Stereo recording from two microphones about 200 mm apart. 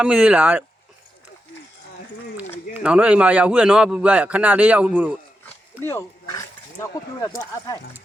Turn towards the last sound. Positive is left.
turn(degrees=15)  # may be behind; listen again after turning